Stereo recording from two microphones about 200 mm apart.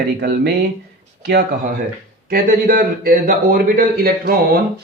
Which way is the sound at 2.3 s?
45° right (ahead or behind).